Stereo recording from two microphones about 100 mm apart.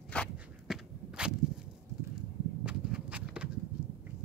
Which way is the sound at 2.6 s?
10° right (ahead or behind).